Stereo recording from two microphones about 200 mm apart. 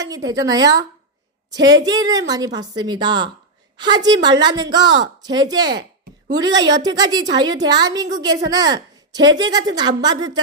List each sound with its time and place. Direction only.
0.1 s a woman's voice: 20° right (ahead or behind)